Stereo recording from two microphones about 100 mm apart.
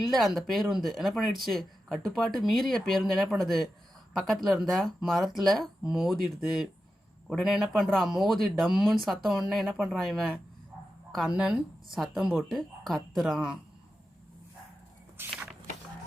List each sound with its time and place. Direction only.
0.1 s speech: centre (ahead or behind)
15.2 s walk: 20° right (ahead or behind)